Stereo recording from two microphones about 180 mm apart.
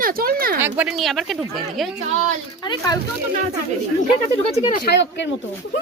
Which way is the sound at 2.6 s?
20° left (ahead or behind).